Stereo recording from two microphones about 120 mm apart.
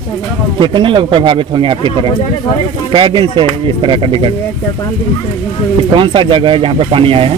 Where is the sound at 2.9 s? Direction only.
40° right (ahead or behind).